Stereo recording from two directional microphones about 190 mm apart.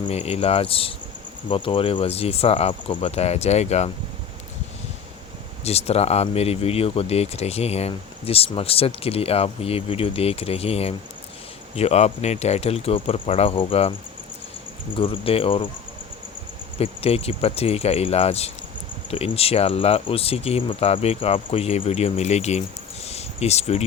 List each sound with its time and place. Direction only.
0.0 s speech: 35° left (ahead or behind)
5.6 s speech: 35° left (ahead or behind)
14.9 s speech: 30° left (ahead or behind)
16.7 s speech: 30° left (ahead or behind)
23.0 s a sound: 35° left (ahead or behind)